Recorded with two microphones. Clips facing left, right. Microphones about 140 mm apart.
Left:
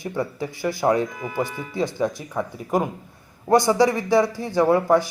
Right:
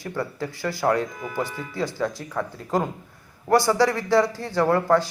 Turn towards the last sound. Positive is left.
turn(degrees=15)  # may be behind; listen again after turning